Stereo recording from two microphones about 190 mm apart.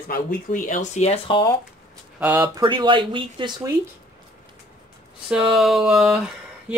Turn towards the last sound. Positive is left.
turn(degrees=0)  # may be behind; listen again after turning